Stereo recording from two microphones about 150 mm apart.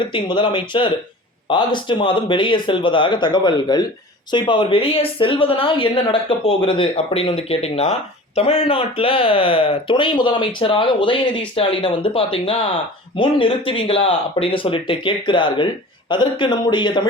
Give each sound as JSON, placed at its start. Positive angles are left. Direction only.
{"t": 0.1, "sound": "speech", "side_deg": 30}